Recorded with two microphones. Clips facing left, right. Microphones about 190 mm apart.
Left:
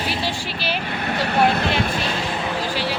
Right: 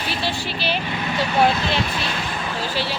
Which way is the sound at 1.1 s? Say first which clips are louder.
Even; 60° left (ahead or behind).